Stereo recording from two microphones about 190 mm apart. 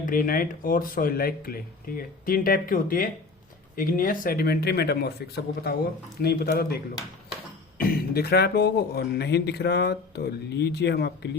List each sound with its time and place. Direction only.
0.0 s speech: 45° left (ahead or behind)
7.8 s speech: 50° left (ahead or behind)